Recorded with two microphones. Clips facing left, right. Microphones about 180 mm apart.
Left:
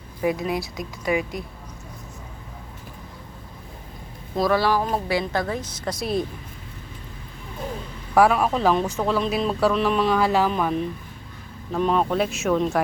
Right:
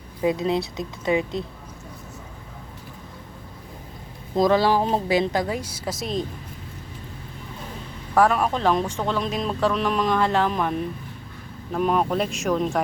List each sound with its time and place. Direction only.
0.2 s a woman's voice: 25° right (ahead or behind)
4.4 s speech: 20° right (ahead or behind); by 6.1 s 5° right (ahead or behind)
8.1 s speech: 10° left (ahead or behind)